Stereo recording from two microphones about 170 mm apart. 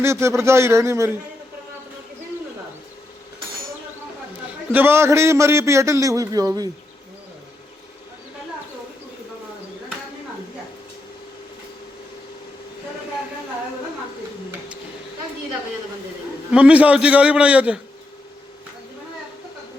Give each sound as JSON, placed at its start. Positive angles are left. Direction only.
{"t": 0.0, "sound": "a man's voice", "side_deg": -15}
{"t": 4.7, "sound": "a man's voice", "side_deg": -15}
{"t": 16.5, "sound": "a man's voice", "side_deg": -5}